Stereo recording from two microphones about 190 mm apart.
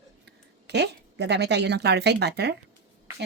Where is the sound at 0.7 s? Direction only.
60° right (ahead or behind).